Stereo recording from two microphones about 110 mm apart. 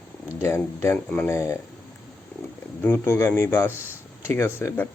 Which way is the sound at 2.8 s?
20° left (ahead or behind).